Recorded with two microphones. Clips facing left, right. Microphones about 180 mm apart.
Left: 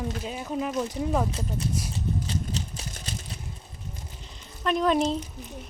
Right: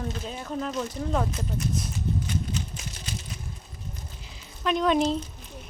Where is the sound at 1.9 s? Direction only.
35° left (ahead or behind).